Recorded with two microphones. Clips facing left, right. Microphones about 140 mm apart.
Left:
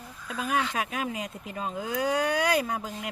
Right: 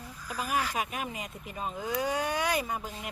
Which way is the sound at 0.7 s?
90° left.